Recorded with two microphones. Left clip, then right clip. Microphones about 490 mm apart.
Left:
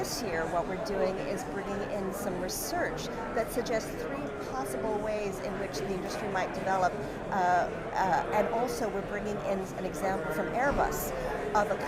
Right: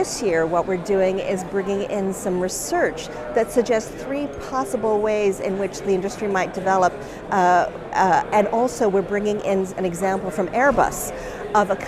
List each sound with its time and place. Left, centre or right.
0.0 s speech: right